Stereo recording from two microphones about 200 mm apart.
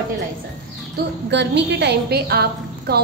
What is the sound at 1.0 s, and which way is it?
A woman's voice, 50° right (ahead or behind).